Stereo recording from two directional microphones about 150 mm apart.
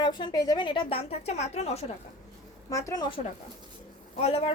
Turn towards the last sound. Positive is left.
turn(degrees=40)  # may be behind; listen again after turning